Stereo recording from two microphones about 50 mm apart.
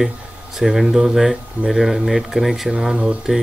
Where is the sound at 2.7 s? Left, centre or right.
Centre.